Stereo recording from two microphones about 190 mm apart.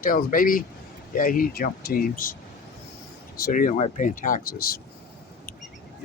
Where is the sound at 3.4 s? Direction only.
45° left (ahead or behind).